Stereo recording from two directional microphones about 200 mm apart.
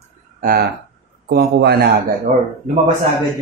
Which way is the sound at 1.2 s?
55° right (ahead or behind).